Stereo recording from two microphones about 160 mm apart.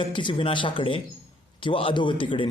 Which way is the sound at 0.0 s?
30° left (ahead or behind).